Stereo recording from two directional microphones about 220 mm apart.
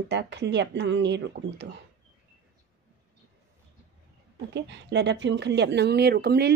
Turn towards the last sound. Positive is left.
turn(degrees=-45)  # may be behind; listen again after turning